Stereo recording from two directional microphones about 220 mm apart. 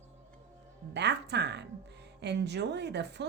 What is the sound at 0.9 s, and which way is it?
Speech, 50° right (ahead or behind).